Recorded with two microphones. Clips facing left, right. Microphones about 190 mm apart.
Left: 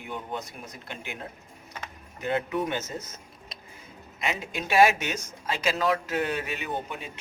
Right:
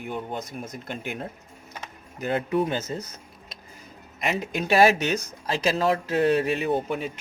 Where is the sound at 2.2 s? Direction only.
35° right (ahead or behind).